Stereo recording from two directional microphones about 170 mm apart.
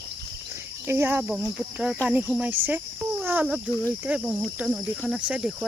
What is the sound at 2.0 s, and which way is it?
Speech, 5° right (ahead or behind).